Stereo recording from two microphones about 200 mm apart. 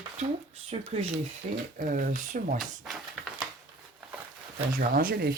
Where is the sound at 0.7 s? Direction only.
30° right (ahead or behind).